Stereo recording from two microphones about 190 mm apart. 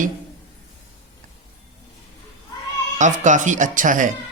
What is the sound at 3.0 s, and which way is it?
Speech, 40° right (ahead or behind).